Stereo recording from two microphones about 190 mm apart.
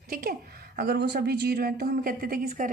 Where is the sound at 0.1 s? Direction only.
50° right (ahead or behind).